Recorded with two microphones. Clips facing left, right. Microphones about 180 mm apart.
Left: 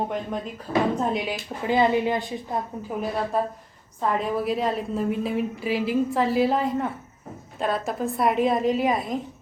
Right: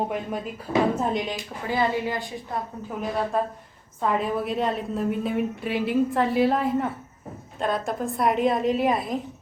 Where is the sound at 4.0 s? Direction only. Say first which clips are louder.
Even; centre (ahead or behind).